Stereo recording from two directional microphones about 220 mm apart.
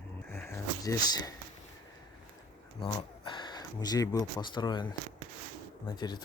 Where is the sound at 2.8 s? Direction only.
20° left (ahead or behind).